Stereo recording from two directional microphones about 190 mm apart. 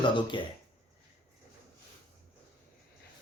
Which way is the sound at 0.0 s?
25° left (ahead or behind).